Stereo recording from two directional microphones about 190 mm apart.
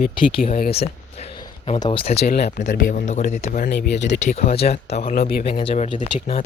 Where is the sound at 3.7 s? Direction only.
60° left (ahead or behind).